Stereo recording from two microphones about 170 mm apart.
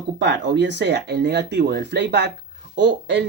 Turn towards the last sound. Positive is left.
turn(degrees=-90)